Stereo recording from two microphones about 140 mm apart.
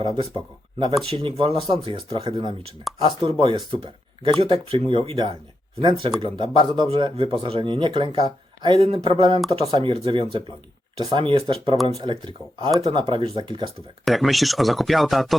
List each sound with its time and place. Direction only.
0.0 s speech: 35° right (ahead or behind)
14.0 s speech: centre (ahead or behind)